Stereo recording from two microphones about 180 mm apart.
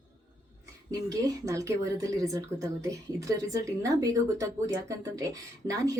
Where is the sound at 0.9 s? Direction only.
20° right (ahead or behind).